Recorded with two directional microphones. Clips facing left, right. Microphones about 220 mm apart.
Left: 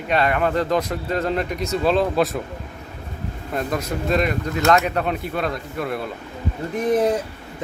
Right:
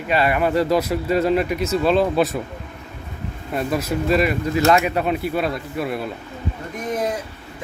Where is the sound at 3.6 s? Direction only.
5° right (ahead or behind).